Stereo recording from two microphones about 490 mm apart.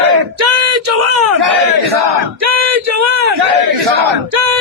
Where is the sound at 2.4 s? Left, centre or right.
Right.